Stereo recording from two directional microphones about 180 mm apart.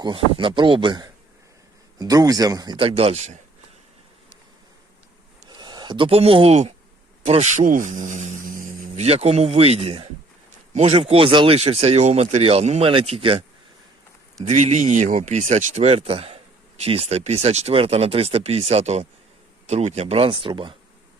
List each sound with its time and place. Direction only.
0.0 s a man's voice: 25° right (ahead or behind)
5.5 s speech: 25° right (ahead or behind)
14.4 s speech: 40° right (ahead or behind)